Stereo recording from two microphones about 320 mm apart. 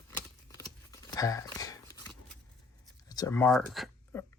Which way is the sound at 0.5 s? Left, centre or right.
Centre.